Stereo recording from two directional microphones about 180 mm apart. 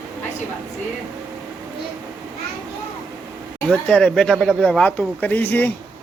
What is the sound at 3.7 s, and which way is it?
Speech, 5° left (ahead or behind).